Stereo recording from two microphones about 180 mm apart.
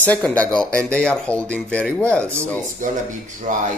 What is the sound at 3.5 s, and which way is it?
Speech, 45° right (ahead or behind).